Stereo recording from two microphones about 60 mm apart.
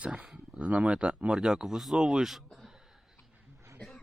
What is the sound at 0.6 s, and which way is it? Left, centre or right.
Speech, centre.